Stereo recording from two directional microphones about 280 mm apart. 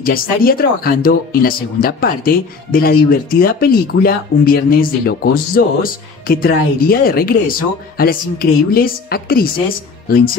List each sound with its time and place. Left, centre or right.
0.0 s speech: left